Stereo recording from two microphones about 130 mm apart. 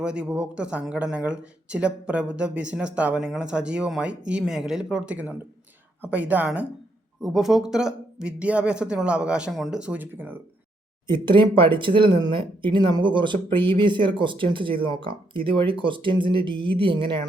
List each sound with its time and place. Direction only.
0.0 s speech: 5° right (ahead or behind)
11.0 s speech: 35° right (ahead or behind)